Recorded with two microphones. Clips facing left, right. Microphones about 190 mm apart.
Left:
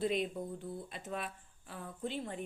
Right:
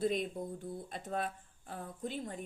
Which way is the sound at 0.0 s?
45° right (ahead or behind).